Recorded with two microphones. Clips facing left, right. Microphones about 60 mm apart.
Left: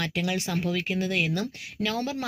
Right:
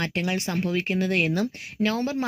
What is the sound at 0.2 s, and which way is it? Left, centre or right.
Speech, right.